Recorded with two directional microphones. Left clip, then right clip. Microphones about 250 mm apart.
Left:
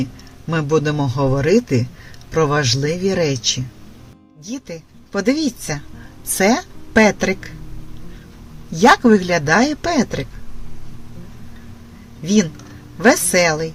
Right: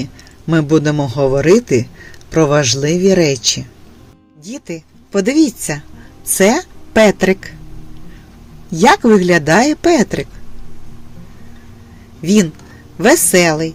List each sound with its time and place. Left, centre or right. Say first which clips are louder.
0.0 s speech: even; right
4.4 s speech: right 3 dB; right
8.7 s speech: right 2 dB; right
13.0 s speech: right 3 dB; right